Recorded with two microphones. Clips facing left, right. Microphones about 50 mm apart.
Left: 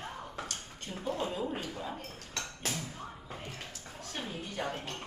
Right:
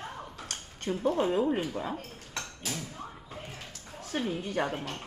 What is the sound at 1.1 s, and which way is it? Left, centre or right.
Speech, right.